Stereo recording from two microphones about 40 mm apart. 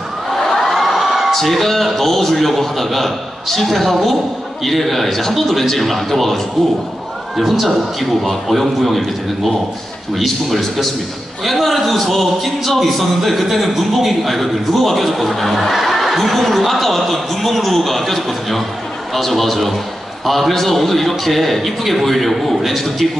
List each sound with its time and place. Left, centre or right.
0.5 s crowd: centre
1.3 s a man's voice: centre